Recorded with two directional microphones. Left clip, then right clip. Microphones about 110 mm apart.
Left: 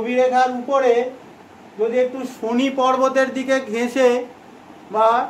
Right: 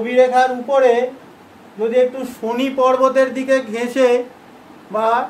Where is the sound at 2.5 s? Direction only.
40° left (ahead or behind); by 4.1 s 15° left (ahead or behind).